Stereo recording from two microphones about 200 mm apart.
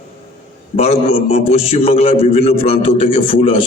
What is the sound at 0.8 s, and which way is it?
A man's voice, 30° left (ahead or behind).